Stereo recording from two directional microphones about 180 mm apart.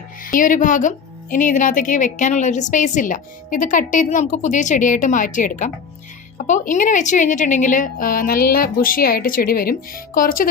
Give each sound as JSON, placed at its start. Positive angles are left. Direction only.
{"t": 0.2, "sound": "speech", "side_deg": 50}